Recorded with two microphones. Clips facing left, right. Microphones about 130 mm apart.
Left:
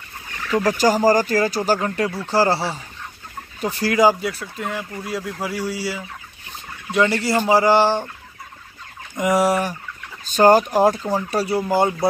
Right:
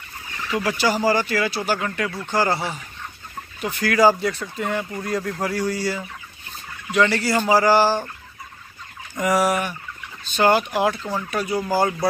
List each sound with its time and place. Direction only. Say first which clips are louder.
0.5 s speech: left 4 dB; 45° left (ahead or behind)
3.9 s speech: even; 15° left (ahead or behind)
6.9 s speech: left 1 dB; 25° left (ahead or behind)
9.1 s speech: left 2 dB; 20° left (ahead or behind)